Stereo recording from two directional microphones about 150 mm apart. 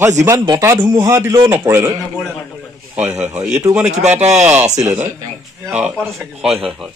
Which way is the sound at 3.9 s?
45° right (ahead or behind).